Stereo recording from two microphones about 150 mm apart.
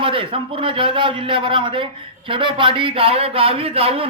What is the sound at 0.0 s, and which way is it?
Speech, 35° right (ahead or behind).